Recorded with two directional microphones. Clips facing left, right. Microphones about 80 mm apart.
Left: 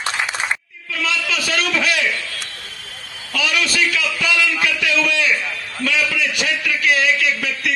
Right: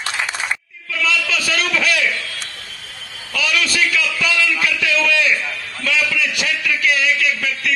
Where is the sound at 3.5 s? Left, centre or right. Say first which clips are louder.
Right 1 dB; left.